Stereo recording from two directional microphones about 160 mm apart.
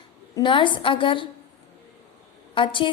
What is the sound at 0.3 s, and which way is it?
Speech, 30° left (ahead or behind).